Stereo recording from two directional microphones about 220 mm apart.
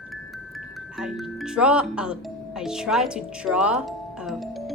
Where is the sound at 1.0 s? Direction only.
Centre (ahead or behind).